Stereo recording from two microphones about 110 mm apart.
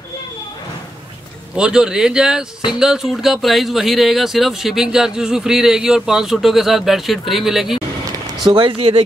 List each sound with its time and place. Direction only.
1.5 s speech: 5° right (ahead or behind)
8.5 s speech: 50° right (ahead or behind)